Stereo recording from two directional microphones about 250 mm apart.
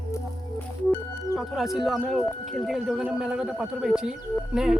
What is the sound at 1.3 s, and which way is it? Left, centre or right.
Speech, centre.